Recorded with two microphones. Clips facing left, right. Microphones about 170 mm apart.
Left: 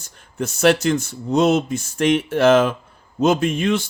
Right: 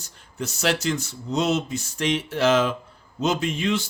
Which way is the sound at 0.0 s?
50° left (ahead or behind).